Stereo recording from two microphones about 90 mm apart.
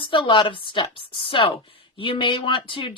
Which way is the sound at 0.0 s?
65° left (ahead or behind).